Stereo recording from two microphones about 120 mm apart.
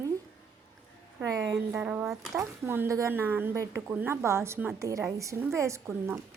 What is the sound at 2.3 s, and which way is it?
A woman's voice, 20° right (ahead or behind).